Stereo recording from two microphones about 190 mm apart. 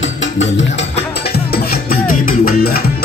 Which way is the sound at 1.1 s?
55° left (ahead or behind).